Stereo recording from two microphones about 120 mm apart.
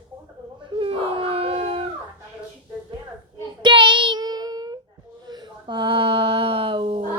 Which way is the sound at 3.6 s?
40° right (ahead or behind).